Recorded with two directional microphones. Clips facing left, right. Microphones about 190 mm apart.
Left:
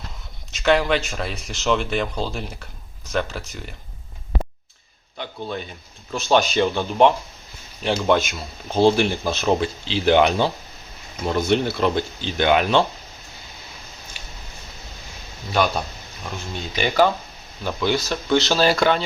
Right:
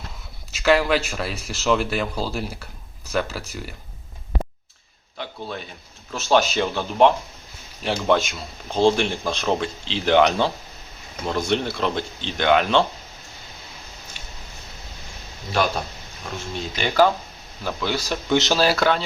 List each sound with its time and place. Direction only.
0.5 s speech: 5° right (ahead or behind)
5.1 s a man's voice: centre (ahead or behind)
14.2 s a sound: 10° left (ahead or behind)
16.7 s speech: centre (ahead or behind)
18.0 s speech: 15° right (ahead or behind)
18.5 s speech: 5° right (ahead or behind)